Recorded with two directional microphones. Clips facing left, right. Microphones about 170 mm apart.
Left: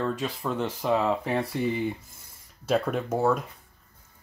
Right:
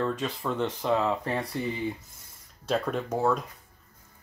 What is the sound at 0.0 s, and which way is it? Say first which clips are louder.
Speech: even; centre (ahead or behind).